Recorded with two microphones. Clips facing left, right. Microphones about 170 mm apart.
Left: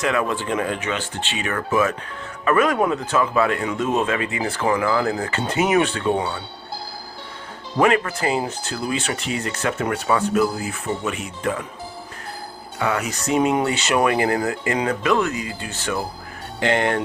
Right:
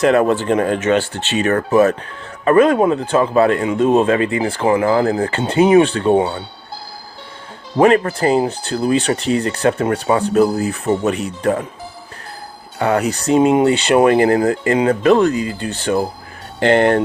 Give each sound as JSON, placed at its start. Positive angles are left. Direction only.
{"t": 0.0, "sound": "speech", "side_deg": -40}
{"t": 0.9, "sound": "speech", "side_deg": -75}
{"t": 1.4, "sound": "speech", "side_deg": -40}
{"t": 7.8, "sound": "speech", "side_deg": -35}
{"t": 12.8, "sound": "speech", "side_deg": -35}